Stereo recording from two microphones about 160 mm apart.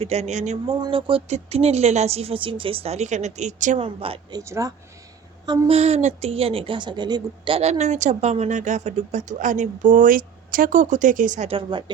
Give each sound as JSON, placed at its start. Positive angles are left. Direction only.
{"t": 0.0, "sound": "a woman's voice", "side_deg": -40}
{"t": 0.8, "sound": "speech", "side_deg": -30}
{"t": 3.8, "sound": "speech", "side_deg": -35}
{"t": 4.4, "sound": "speech", "side_deg": -20}
{"t": 5.5, "sound": "a woman's voice", "side_deg": -40}
{"t": 11.4, "sound": "speech", "side_deg": -35}